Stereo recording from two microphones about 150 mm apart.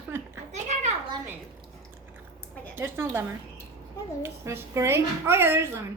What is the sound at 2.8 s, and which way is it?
Speech, 15° right (ahead or behind).